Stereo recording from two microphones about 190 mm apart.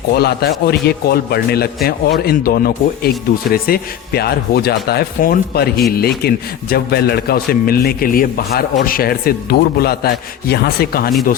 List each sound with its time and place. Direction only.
0.1 s a man's voice: 55° left (ahead or behind)